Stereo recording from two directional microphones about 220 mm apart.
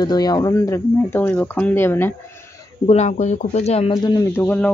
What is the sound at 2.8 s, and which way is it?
Speech, 30° left (ahead or behind).